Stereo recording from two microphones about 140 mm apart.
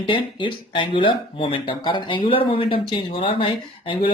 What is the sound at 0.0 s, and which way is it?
Speech, 35° left (ahead or behind).